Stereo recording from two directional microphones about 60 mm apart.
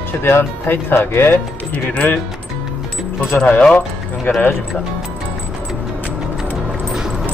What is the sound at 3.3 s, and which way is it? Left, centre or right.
Speech, left.